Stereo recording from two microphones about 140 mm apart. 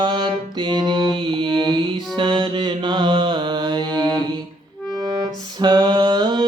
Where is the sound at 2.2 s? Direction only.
35° right (ahead or behind).